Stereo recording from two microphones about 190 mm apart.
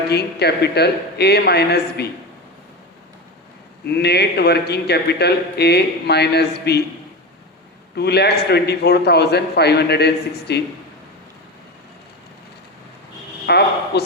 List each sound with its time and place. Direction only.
0.1 s a man's voice: 60° left (ahead or behind)
3.8 s a man's voice: 60° left (ahead or behind)
7.9 s a man's voice: 60° left (ahead or behind)
13.5 s a man's voice: 60° left (ahead or behind)